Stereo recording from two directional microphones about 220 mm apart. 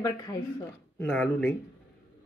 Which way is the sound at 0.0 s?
15° left (ahead or behind).